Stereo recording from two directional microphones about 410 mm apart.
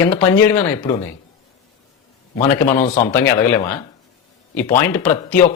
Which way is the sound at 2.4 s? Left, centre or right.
Centre.